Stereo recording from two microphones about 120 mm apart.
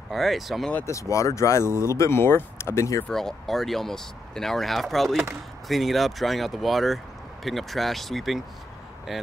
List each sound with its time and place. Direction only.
0.1 s speech: centre (ahead or behind)
0.8 s speech: 25° left (ahead or behind)
3.1 s speech: 5° left (ahead or behind)